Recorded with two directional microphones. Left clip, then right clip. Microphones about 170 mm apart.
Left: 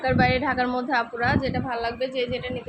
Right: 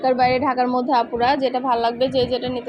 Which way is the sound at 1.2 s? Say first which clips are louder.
Right 6 dB; 30° right (ahead or behind).